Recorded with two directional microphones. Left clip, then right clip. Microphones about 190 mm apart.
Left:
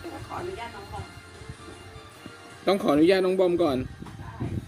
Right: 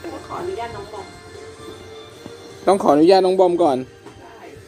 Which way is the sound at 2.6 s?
25° left (ahead or behind).